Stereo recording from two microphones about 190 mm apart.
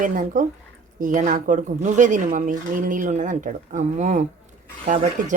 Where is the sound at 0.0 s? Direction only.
40° right (ahead or behind).